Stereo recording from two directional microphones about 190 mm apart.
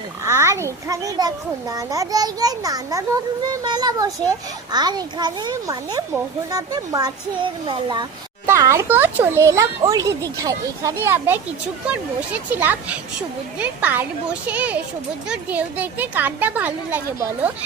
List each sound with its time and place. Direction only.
0.3 s a child's voice: 15° right (ahead or behind)
12.5 s a child's voice: 10° right (ahead or behind)